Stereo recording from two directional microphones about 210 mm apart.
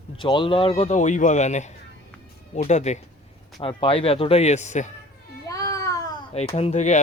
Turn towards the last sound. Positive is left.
turn(degrees=35)  # may be behind; listen again after turning